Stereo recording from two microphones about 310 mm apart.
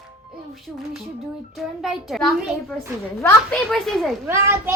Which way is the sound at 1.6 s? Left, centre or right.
Centre.